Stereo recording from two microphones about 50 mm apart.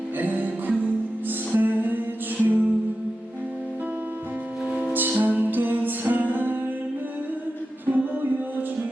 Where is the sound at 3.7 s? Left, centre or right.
Right.